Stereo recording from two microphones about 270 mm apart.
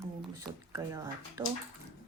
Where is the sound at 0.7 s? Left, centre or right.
Centre.